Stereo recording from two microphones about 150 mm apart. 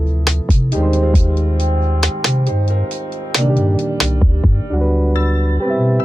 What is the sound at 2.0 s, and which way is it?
Music, centre (ahead or behind).